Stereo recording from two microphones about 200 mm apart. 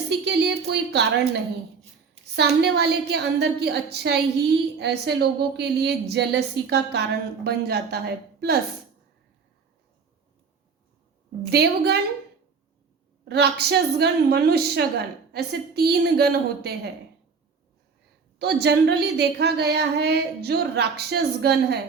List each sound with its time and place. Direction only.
0.1 s a sound: 55° right (ahead or behind)
2.3 s a woman's voice: 55° right (ahead or behind)
11.4 s a woman's voice: 55° right (ahead or behind)
13.2 s a woman's voice: 55° right (ahead or behind)
18.3 s a woman's voice: 55° right (ahead or behind)